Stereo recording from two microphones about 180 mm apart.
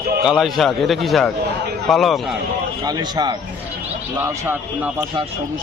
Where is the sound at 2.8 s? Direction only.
25° right (ahead or behind).